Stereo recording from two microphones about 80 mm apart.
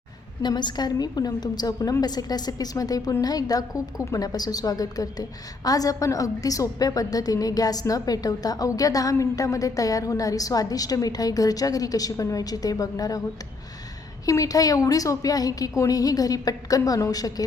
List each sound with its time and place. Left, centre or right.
0.4 s a woman's voice: left
14.3 s a woman's voice: left